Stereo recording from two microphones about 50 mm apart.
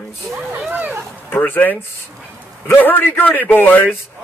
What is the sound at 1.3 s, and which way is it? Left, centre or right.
A man's voice, left.